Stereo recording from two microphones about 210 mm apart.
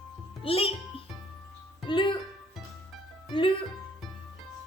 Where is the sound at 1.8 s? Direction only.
25° left (ahead or behind).